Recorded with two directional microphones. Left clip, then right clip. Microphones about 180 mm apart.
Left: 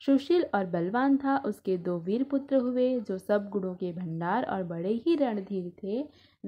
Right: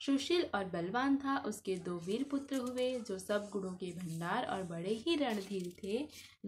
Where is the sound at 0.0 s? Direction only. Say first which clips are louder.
Left 8 dB; 45° left (ahead or behind).